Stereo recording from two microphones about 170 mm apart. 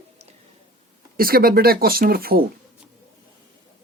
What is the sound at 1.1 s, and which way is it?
Speech, 60° right (ahead or behind).